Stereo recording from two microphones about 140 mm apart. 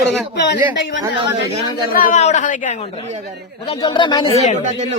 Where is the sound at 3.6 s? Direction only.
40° left (ahead or behind).